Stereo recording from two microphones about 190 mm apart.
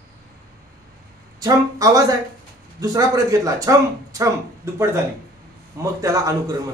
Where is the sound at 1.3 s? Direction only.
20° right (ahead or behind).